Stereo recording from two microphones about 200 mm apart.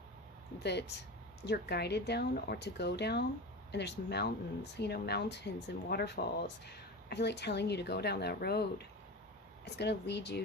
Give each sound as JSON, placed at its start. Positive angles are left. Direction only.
{"t": 0.6, "sound": "speech", "side_deg": 55}
{"t": 9.6, "sound": "speech", "side_deg": 55}